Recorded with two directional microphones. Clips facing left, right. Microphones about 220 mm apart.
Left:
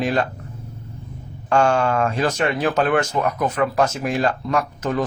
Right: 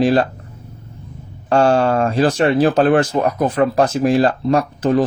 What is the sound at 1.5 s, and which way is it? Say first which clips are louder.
Speech: right 4 dB; 35° right (ahead or behind).